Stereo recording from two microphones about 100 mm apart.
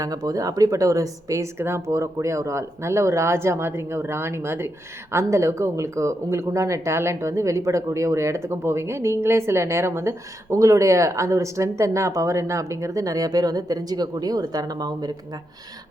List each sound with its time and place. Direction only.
0.0 s a woman's voice: 35° right (ahead or behind)